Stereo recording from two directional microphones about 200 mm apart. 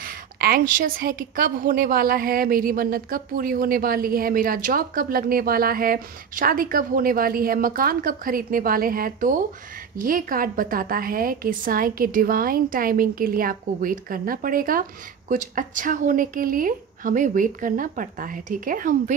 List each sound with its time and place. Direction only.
0.0 s a woman's voice: 45° right (ahead or behind)